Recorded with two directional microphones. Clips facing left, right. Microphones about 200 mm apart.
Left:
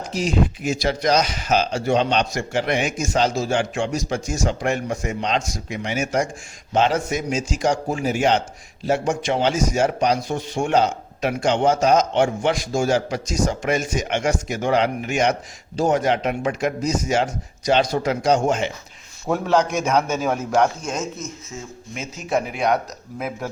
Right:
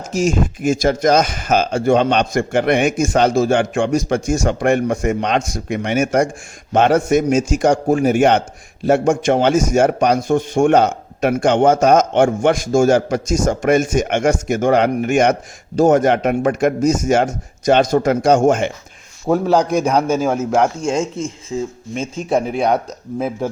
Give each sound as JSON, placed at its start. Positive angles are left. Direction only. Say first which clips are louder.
{"t": 0.1, "sound": "a man's voice", "louder": "right 4 dB", "side_deg": -45}
{"t": 19.3, "sound": "a man's voice", "louder": "right 5 dB", "side_deg": -35}